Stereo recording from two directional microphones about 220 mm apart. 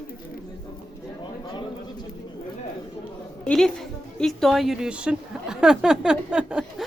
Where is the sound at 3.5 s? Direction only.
Centre (ahead or behind).